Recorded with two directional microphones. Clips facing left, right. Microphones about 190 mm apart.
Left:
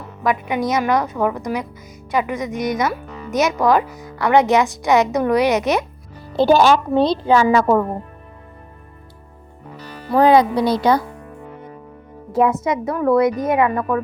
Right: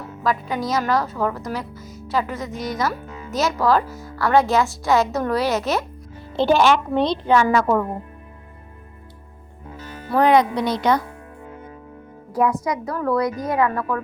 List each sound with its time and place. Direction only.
0.2 s speech: 20° left (ahead or behind)
6.3 s a child's voice: 40° left (ahead or behind)
10.2 s a child's voice: 30° left (ahead or behind)
12.3 s a woman's voice: 25° left (ahead or behind)